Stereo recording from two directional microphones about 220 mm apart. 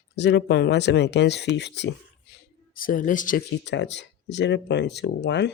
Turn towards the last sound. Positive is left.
turn(degrees=50)  # may be behind; listen again after turning